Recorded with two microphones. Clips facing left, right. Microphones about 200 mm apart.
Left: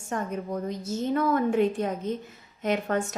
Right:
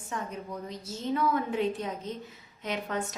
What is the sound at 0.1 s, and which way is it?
A woman's voice, 50° left (ahead or behind).